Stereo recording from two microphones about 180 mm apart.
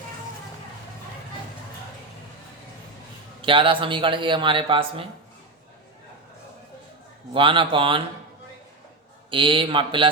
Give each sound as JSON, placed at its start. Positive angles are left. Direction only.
{"t": 3.4, "sound": "speech", "side_deg": -30}
{"t": 7.3, "sound": "speech", "side_deg": -30}
{"t": 9.3, "sound": "speech", "side_deg": -30}